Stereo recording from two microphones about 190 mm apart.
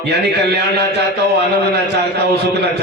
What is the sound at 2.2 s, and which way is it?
Speech, 60° right (ahead or behind).